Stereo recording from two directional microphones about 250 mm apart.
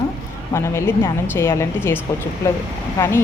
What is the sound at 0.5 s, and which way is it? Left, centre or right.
A woman's voice, centre.